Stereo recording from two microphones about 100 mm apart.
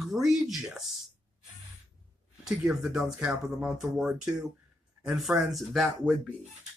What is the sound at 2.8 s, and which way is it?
Speech, 5° right (ahead or behind).